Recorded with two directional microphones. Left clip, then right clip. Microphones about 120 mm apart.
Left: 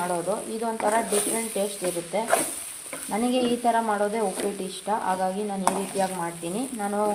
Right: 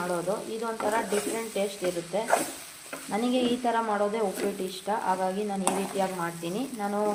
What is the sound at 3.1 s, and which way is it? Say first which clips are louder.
Speech: left 2 dB; 15° left (ahead or behind).